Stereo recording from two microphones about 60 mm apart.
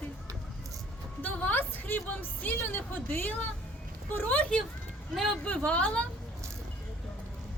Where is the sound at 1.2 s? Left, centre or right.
Left.